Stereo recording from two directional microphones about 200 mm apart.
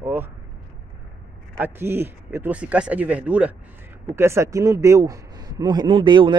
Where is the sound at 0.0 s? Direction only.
10° right (ahead or behind).